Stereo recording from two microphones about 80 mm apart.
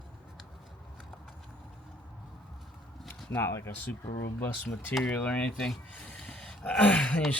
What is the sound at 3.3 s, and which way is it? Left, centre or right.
Speech, left.